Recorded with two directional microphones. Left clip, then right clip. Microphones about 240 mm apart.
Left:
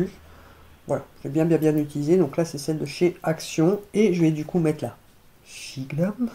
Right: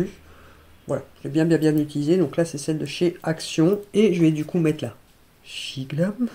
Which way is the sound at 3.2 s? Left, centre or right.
Right.